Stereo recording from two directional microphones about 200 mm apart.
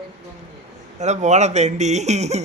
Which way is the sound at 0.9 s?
35° right (ahead or behind).